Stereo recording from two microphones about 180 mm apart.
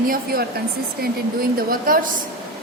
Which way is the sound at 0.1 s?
55° right (ahead or behind).